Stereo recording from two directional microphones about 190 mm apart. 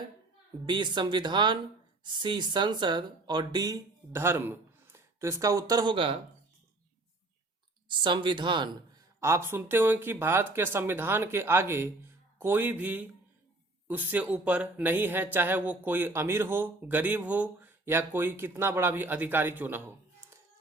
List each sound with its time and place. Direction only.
0.6 s speech: 25° right (ahead or behind)
7.9 s speech: 25° right (ahead or behind)
9.2 s speech: 15° right (ahead or behind)